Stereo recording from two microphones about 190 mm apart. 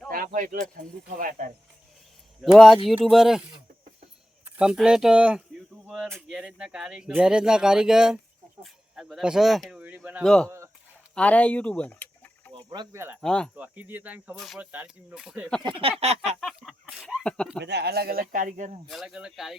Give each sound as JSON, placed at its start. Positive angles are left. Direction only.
{"t": 0.1, "sound": "speech", "side_deg": -50}
{"t": 2.4, "sound": "speech", "side_deg": 0}
{"t": 10.2, "sound": "speech", "side_deg": 5}
{"t": 12.5, "sound": "a sound", "side_deg": -25}
{"t": 13.2, "sound": "speech", "side_deg": 5}
{"t": 13.6, "sound": "speech", "side_deg": -10}
{"t": 15.6, "sound": "a sound", "side_deg": -30}
{"t": 16.4, "sound": "speech", "side_deg": 0}
{"t": 17.6, "sound": "speech", "side_deg": -60}
{"t": 18.9, "sound": "speech", "side_deg": 0}